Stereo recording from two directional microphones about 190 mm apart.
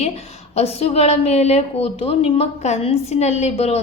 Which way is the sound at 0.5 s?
30° left (ahead or behind).